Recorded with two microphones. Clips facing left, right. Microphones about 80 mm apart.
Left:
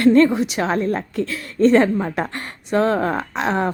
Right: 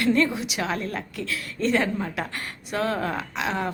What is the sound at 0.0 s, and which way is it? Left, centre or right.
A woman's voice, left.